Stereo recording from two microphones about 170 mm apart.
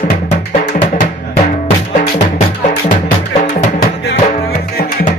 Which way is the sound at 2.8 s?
50° left (ahead or behind).